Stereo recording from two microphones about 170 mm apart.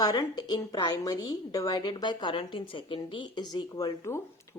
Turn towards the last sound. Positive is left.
turn(degrees=20)  # may be behind; listen again after turning